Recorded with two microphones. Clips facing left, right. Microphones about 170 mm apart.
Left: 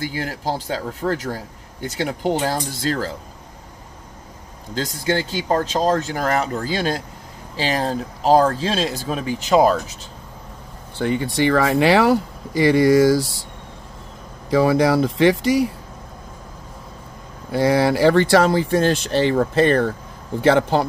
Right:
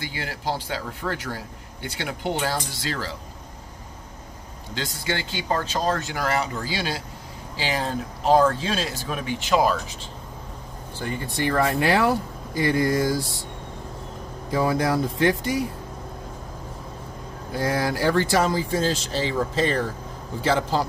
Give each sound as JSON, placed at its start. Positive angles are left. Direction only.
{"t": 0.0, "sound": "speech", "side_deg": 40}
{"t": 4.7, "sound": "speech", "side_deg": 40}
{"t": 11.0, "sound": "speech", "side_deg": 80}
{"t": 14.5, "sound": "speech", "side_deg": 85}
{"t": 17.5, "sound": "a man's voice", "side_deg": 75}